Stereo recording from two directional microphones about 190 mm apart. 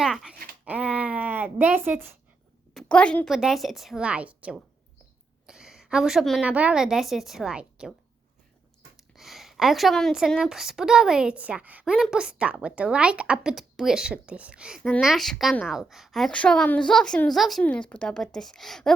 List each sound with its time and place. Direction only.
0.0 s a woman's voice: centre (ahead or behind)
0.6 s a sound: 5° right (ahead or behind)
2.7 s a woman's voice: 5° left (ahead or behind)
9.1 s a woman's voice: centre (ahead or behind)